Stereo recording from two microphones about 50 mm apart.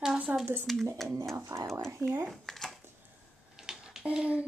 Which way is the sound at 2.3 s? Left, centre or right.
Centre.